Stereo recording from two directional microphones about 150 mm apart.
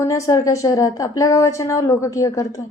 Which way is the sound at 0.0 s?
20° left (ahead or behind).